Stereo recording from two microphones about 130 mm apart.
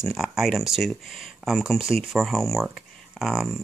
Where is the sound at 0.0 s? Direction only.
Centre (ahead or behind).